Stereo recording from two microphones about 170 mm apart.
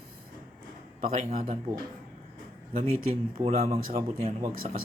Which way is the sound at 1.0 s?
45° right (ahead or behind).